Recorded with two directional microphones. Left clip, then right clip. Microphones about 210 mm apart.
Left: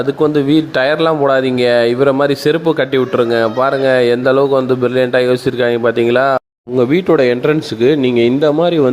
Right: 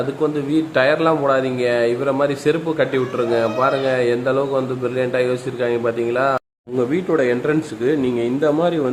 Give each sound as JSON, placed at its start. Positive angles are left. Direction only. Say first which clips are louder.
{"t": 0.2, "sound": "speech", "louder": "left 8 dB", "side_deg": 35}